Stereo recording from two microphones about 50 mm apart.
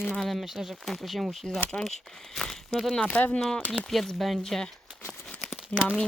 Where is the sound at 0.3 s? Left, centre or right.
Centre.